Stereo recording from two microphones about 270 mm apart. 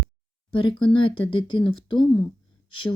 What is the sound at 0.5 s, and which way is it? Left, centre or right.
Speech, centre.